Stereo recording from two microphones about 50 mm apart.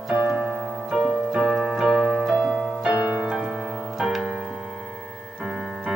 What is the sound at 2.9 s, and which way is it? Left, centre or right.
Music, centre.